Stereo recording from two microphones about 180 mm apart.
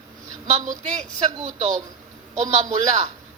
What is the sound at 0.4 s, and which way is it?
A woman's voice, 40° right (ahead or behind).